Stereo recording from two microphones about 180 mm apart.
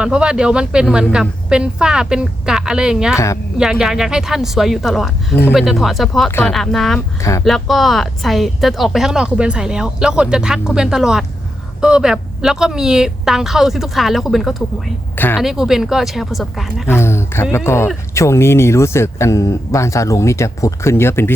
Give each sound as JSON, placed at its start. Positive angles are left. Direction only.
{"t": 0.0, "sound": "speech", "side_deg": -5}
{"t": 7.2, "sound": "speech", "side_deg": 15}
{"t": 7.4, "sound": "speech", "side_deg": 0}
{"t": 15.1, "sound": "a sound", "side_deg": 10}
{"t": 15.4, "sound": "speech", "side_deg": 0}
{"t": 16.9, "sound": "speech", "side_deg": 15}